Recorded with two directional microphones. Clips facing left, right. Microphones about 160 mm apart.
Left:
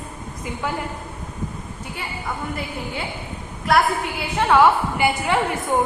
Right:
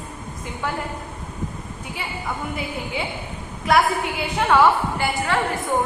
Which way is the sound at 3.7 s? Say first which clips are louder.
Even; centre (ahead or behind).